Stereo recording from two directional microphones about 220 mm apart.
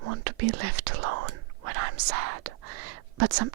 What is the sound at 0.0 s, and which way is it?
Whispering, 90° right.